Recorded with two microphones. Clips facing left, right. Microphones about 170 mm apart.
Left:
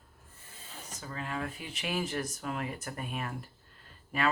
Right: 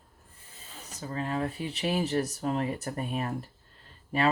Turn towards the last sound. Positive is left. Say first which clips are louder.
# right 5 dB
turn(degrees=-35)  # may be behind; listen again after turning